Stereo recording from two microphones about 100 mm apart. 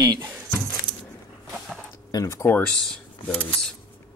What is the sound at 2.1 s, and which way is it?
Speech, 35° left (ahead or behind).